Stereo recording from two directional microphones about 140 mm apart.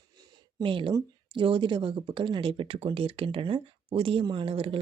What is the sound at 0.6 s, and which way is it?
Speech, 35° right (ahead or behind).